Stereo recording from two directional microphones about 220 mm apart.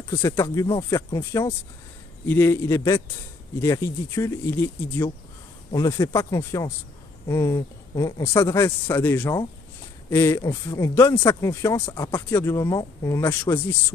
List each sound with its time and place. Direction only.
0.1 s speech: 15° left (ahead or behind)